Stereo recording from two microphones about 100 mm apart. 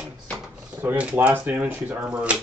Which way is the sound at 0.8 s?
15° right (ahead or behind).